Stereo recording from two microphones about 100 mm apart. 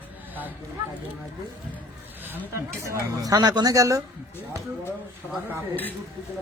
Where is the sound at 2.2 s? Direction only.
25° right (ahead or behind).